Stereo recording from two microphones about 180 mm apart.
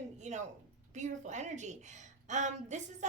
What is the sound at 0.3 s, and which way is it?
A woman's voice, 40° right (ahead or behind).